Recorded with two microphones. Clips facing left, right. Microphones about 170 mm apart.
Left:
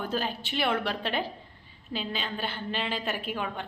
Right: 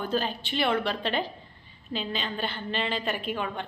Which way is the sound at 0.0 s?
10° left (ahead or behind).